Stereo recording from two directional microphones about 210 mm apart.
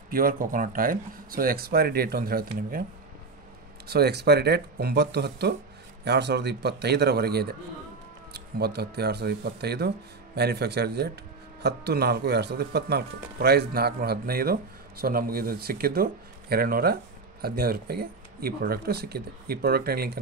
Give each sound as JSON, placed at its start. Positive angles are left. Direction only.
{"t": 0.1, "sound": "speech", "side_deg": -40}
{"t": 3.8, "sound": "speech", "side_deg": -50}